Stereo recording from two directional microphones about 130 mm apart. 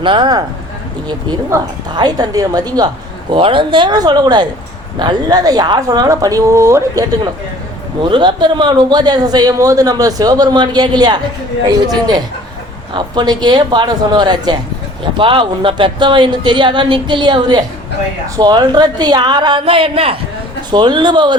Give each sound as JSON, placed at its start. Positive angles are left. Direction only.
{"t": 0.0, "sound": "a man's voice", "side_deg": -40}
{"t": 1.9, "sound": "a man's voice", "side_deg": -30}
{"t": 8.0, "sound": "a man's voice", "side_deg": -40}
{"t": 12.9, "sound": "a man's voice", "side_deg": -35}
{"t": 20.7, "sound": "a man's voice", "side_deg": -35}